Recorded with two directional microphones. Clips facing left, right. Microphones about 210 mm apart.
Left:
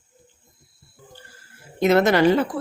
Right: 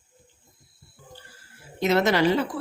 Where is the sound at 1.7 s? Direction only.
50° left (ahead or behind).